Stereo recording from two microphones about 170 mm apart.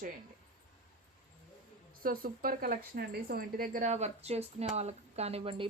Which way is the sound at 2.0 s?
55° right (ahead or behind).